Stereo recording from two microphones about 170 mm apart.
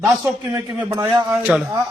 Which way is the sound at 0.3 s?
20° right (ahead or behind).